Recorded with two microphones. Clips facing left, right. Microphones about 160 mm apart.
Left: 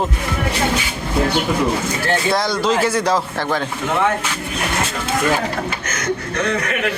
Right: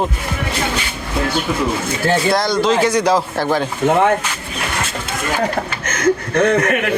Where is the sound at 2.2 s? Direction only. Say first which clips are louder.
Right 1 dB; 5° left (ahead or behind).